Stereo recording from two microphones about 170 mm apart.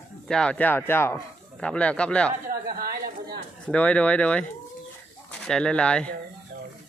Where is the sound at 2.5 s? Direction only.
60° right (ahead or behind).